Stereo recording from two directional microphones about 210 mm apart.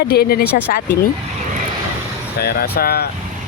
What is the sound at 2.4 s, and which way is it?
Speech, 45° left (ahead or behind).